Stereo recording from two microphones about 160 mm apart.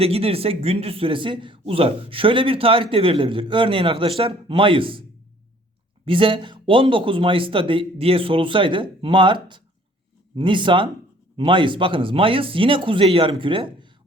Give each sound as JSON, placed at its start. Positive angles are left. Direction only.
{"t": 0.0, "sound": "speech", "side_deg": -35}
{"t": 6.1, "sound": "speech", "side_deg": -30}